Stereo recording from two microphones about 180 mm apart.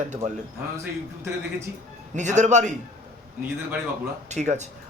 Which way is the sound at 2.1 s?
40° right (ahead or behind).